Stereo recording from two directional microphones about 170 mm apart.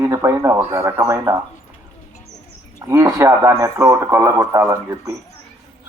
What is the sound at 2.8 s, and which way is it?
A man's voice, 20° right (ahead or behind).